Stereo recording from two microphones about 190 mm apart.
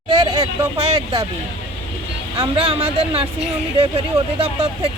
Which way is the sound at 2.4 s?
30° right (ahead or behind).